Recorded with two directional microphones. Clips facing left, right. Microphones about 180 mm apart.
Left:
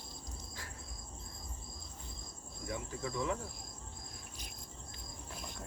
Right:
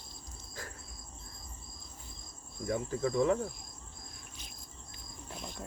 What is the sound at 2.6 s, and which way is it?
Cricket, 40° right (ahead or behind).